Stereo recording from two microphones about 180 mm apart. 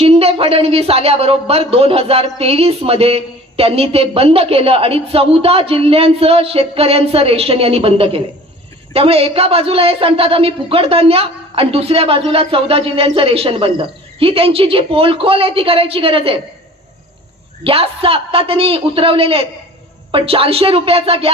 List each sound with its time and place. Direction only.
0.0 s speech: 35° right (ahead or behind)
17.6 s speech: 30° right (ahead or behind)